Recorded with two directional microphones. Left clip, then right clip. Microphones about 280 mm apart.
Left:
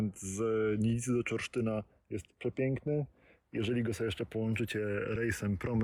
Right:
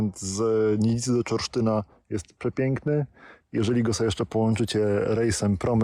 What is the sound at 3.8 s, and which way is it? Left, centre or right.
Speech, right.